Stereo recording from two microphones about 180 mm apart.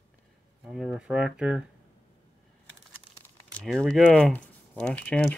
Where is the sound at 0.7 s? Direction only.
5° right (ahead or behind).